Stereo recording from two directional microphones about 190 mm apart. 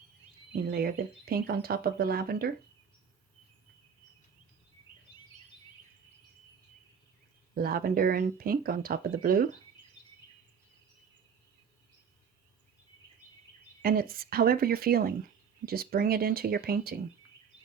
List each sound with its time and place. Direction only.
0.7 s speech: 55° right (ahead or behind)
7.5 s speech: 50° right (ahead or behind)
13.8 s speech: 50° right (ahead or behind)